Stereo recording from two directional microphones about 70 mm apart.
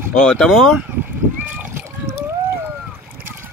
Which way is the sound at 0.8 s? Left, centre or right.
Right.